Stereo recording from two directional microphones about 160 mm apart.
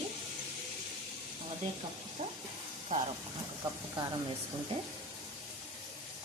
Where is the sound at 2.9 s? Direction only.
55° right (ahead or behind).